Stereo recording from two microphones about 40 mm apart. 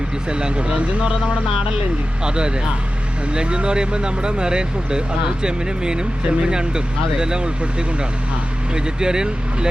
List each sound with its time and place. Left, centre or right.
0.3 s speech: right
2.2 s speech: right